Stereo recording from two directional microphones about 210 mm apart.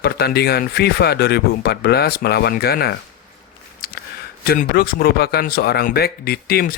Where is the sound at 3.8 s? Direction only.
45° left (ahead or behind).